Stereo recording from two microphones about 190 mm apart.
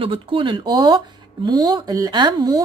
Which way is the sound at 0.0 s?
25° right (ahead or behind).